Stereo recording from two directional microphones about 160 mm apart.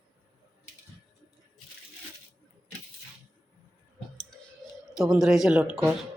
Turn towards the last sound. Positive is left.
turn(degrees=-5)  # may be behind; listen again after turning